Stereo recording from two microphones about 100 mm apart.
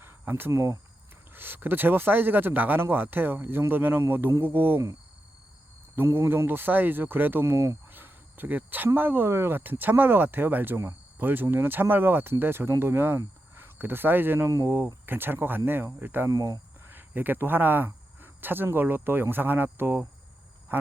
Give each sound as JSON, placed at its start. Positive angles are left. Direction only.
{"t": 0.0, "sound": "speech", "side_deg": -20}
{"t": 6.0, "sound": "speech", "side_deg": -25}
{"t": 16.3, "sound": "cricket", "side_deg": -35}
{"t": 16.9, "sound": "speech", "side_deg": -20}